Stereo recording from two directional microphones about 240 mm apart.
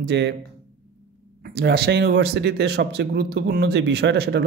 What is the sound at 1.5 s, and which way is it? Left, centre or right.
Speech, right.